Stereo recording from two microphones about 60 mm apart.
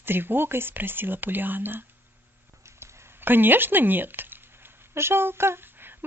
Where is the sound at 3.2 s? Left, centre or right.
Right.